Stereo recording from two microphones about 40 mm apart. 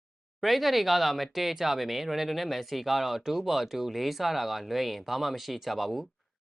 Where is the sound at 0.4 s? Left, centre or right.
Centre.